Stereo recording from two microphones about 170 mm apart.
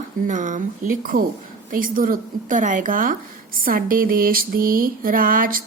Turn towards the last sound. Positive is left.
turn(degrees=-55)  # may be behind; listen again after turning